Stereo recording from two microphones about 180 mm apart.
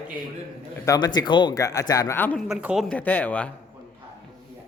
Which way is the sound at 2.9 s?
10° left (ahead or behind).